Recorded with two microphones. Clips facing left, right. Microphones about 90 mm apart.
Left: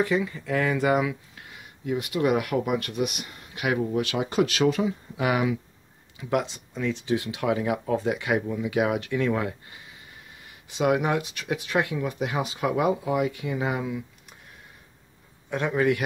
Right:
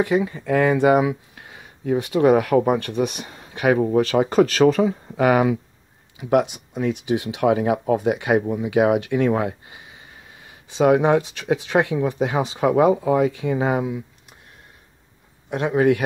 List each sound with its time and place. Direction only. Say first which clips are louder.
0.5 s speech: right 7 dB; 25° right (ahead or behind); by 5.6 s 45° right (ahead or behind)
6.1 s speech: right 7 dB; 15° right (ahead or behind)
15.7 s speech: right 6 dB; 25° right (ahead or behind)